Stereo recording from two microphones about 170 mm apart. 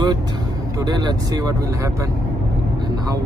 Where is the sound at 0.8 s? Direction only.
25° right (ahead or behind).